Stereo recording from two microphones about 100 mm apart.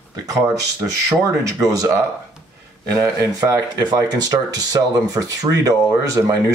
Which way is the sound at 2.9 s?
35° right (ahead or behind).